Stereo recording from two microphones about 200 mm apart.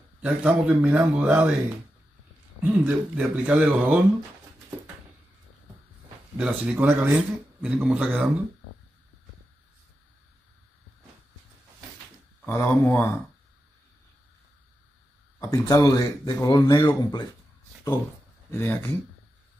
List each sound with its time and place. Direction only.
0.2 s speech: 5° right (ahead or behind)
2.6 s speech: 10° right (ahead or behind)
6.3 s speech: 5° right (ahead or behind)
12.4 s speech: 10° left (ahead or behind)
15.3 s speech: 15° left (ahead or behind)
18.5 s speech: 10° left (ahead or behind)